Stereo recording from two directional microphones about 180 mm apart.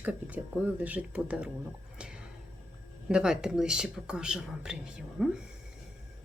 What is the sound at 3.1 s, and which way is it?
Speech, 5° right (ahead or behind).